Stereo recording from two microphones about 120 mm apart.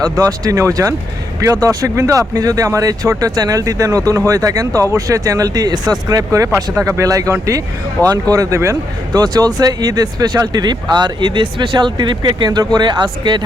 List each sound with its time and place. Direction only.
0.0 s speech: 30° right (ahead or behind)